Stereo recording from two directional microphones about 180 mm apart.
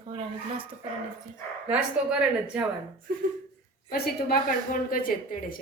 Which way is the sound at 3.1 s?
55° right (ahead or behind).